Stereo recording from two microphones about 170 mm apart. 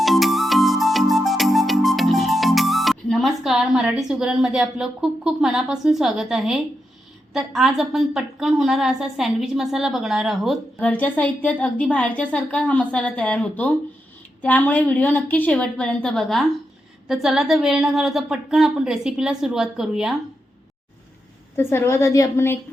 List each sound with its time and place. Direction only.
0.0 s music: centre (ahead or behind)
7.3 s a woman's voice: centre (ahead or behind)
21.5 s a woman's voice: 15° left (ahead or behind)